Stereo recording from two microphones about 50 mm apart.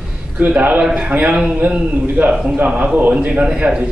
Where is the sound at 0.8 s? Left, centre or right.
Centre.